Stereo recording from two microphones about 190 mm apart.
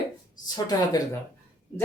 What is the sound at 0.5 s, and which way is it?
Speech, 20° left (ahead or behind).